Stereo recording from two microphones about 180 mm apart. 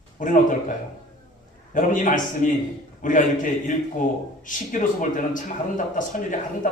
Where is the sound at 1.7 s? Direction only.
45° left (ahead or behind).